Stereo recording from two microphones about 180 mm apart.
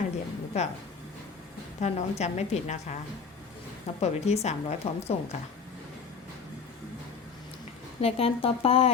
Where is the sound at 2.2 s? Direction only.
40° left (ahead or behind).